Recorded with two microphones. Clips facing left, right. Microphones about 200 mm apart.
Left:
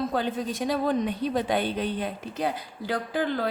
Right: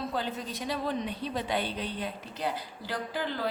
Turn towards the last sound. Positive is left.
turn(degrees=50)  # may be behind; listen again after turning